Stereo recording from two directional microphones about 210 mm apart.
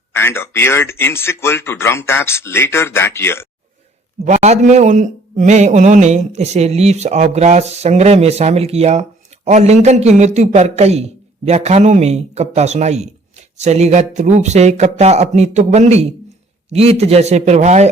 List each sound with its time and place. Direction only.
0.1 s speech: 10° left (ahead or behind)
4.2 s a man's voice: 30° right (ahead or behind)